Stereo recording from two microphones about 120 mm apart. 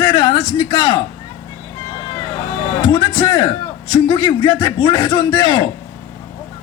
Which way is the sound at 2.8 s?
40° left (ahead or behind).